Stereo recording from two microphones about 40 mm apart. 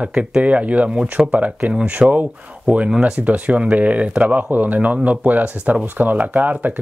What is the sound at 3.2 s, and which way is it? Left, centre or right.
Speech, right.